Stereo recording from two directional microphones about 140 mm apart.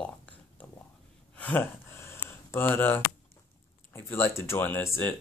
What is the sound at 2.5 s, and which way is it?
Speech, 15° left (ahead or behind).